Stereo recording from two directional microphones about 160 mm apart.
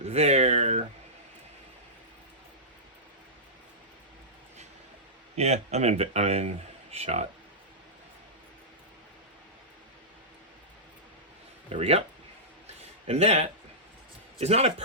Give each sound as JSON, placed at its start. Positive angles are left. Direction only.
{"t": 0.0, "sound": "speech", "side_deg": -40}
{"t": 5.4, "sound": "speech", "side_deg": -40}
{"t": 11.7, "sound": "speech", "side_deg": -35}
{"t": 12.6, "sound": "a sound", "side_deg": -40}
{"t": 14.3, "sound": "speech", "side_deg": -40}